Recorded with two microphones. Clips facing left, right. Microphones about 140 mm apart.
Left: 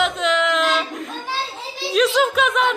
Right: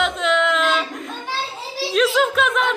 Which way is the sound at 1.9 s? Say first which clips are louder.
Left 1 dB; centre (ahead or behind).